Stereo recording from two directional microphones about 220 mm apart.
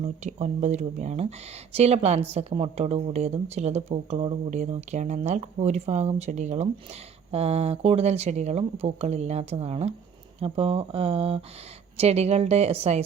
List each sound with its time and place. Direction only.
0.0 s a woman's voice: 30° right (ahead or behind)